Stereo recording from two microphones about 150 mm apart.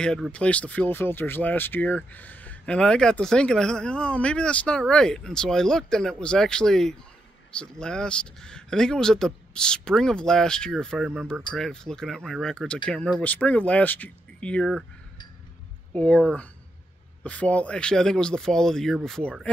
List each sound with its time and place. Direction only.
0.0 s speech: 5° left (ahead or behind)
15.9 s speech: 10° left (ahead or behind)